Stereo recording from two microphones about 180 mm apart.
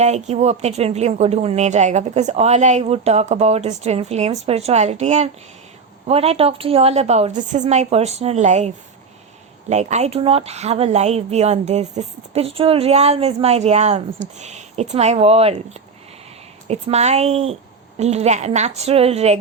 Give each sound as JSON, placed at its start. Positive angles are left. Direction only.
{"t": 0.0, "sound": "speech", "side_deg": -40}